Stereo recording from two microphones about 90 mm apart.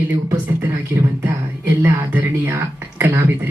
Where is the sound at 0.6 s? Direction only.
25° right (ahead or behind).